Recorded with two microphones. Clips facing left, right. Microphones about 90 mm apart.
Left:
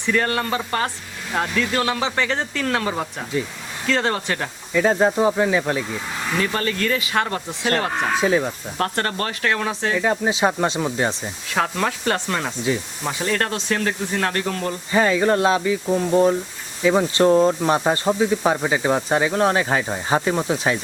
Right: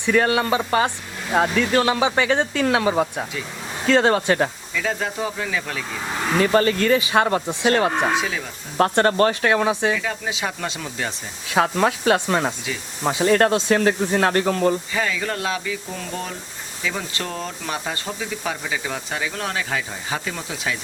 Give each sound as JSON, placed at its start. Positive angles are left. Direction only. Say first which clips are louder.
{"t": 0.0, "sound": "speech", "louder": "right 3 dB", "side_deg": -10}
{"t": 4.7, "sound": "speech", "louder": "left 8 dB", "side_deg": 35}
{"t": 6.4, "sound": "speech", "louder": "right 7 dB", "side_deg": -25}
{"t": 8.1, "sound": "speech", "louder": "left 5 dB", "side_deg": 40}
{"t": 8.8, "sound": "speech", "louder": "right 7 dB", "side_deg": -25}
{"t": 10.0, "sound": "speech", "louder": "left 7 dB", "side_deg": 35}
{"t": 11.5, "sound": "speech", "louder": "right 3 dB", "side_deg": -10}
{"t": 14.9, "sound": "speech", "louder": "left 7 dB", "side_deg": 35}